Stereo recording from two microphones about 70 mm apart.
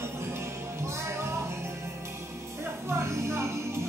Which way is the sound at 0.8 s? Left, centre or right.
Right.